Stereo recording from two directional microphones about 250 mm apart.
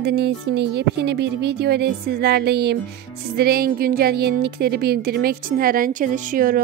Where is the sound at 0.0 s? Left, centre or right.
Right.